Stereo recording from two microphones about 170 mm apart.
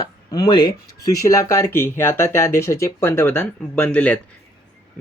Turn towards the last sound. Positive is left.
turn(degrees=10)  # may be behind; listen again after turning